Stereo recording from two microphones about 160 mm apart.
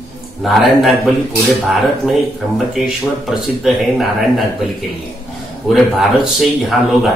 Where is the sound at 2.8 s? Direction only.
Centre (ahead or behind).